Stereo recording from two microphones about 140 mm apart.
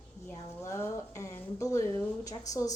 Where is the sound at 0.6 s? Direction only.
20° left (ahead or behind).